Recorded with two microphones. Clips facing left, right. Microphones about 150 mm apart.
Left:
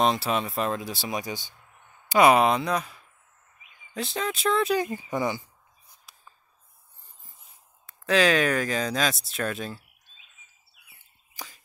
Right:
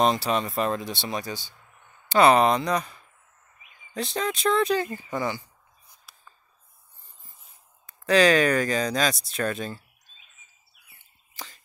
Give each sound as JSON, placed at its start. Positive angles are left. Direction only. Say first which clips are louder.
{"t": 0.0, "sound": "speech", "louder": "right 1 dB", "side_deg": 0}
{"t": 4.7, "sound": "speech", "louder": "left 1 dB", "side_deg": 20}
{"t": 7.8, "sound": "speech", "louder": "right 3 dB", "side_deg": 0}
{"t": 11.3, "sound": "a sound", "louder": "even", "side_deg": 10}